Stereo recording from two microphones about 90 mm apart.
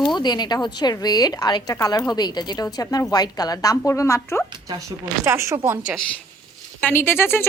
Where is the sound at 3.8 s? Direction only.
30° left (ahead or behind).